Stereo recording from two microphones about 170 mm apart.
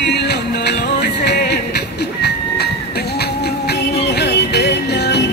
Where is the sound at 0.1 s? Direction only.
75° left (ahead or behind).